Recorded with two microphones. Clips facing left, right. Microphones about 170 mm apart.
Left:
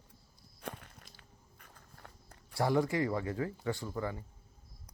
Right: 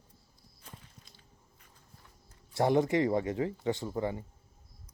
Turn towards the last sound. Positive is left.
turn(degrees=-20)  # may be behind; listen again after turning